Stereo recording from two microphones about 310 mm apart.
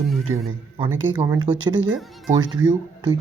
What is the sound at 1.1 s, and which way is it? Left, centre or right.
Speech, centre.